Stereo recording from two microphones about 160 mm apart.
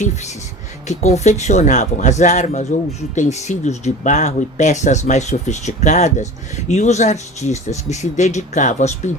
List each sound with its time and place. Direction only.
0.0 s speech: 45° left (ahead or behind)